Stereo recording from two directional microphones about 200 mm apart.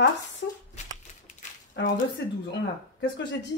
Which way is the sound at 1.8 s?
60° left (ahead or behind).